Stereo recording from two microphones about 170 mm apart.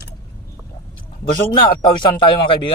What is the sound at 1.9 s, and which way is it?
Speech, 30° left (ahead or behind).